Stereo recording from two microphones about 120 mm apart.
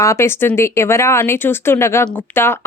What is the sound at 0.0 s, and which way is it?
Speech, 25° left (ahead or behind).